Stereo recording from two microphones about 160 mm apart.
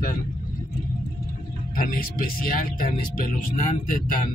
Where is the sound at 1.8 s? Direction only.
60° left (ahead or behind).